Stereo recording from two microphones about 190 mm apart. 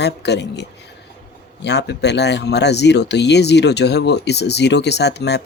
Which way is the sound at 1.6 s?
65° left (ahead or behind).